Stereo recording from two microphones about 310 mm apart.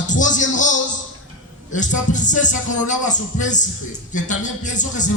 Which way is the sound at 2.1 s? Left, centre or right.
Left.